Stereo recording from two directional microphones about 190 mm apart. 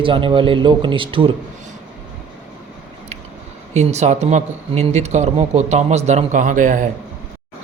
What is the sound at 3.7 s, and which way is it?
Speech, 35° right (ahead or behind).